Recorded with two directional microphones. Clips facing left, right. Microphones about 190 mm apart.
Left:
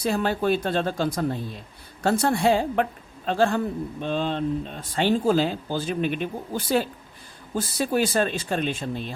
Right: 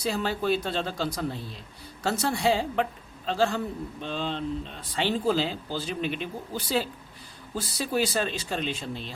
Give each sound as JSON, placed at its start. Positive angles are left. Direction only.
{"t": 0.0, "sound": "speech", "side_deg": 55}